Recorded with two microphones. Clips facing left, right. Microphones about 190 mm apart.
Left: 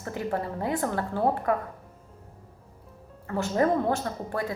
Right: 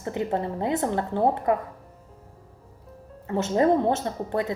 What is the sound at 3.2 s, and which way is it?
A woman's voice, 20° right (ahead or behind).